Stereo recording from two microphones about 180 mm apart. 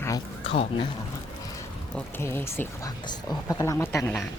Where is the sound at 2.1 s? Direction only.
15° left (ahead or behind).